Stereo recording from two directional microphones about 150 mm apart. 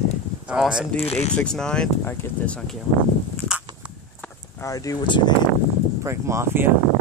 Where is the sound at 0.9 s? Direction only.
45° left (ahead or behind).